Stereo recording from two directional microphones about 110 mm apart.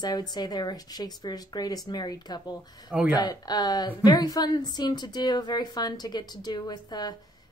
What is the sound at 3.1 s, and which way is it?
A woman's voice, 40° left (ahead or behind).